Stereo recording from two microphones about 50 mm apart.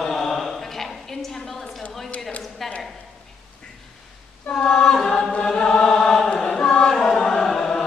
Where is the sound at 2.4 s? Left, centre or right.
Centre.